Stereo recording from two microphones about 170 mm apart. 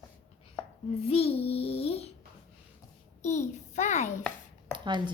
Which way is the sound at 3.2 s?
45° left (ahead or behind).